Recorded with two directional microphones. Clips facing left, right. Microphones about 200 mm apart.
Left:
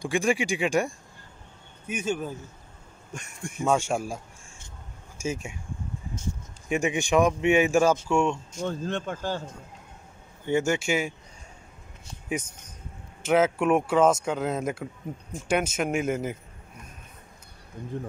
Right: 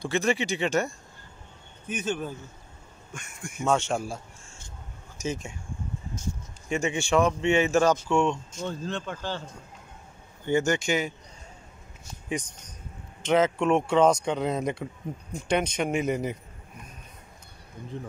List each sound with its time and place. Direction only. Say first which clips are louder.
0.0 s speech: left 1 dB; 10° left (ahead or behind)
3.2 s speech: left 3 dB; 30° left (ahead or behind)
3.6 s speech: left 1 dB; 10° left (ahead or behind)
6.7 s speech: left 1 dB; 15° left (ahead or behind)
8.6 s speech: left 3 dB; 50° left (ahead or behind)
10.4 s speech: even; 5° left (ahead or behind)
12.3 s speech: left 1 dB; 5° left (ahead or behind)